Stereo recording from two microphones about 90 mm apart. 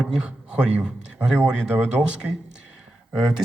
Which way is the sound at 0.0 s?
10° right (ahead or behind).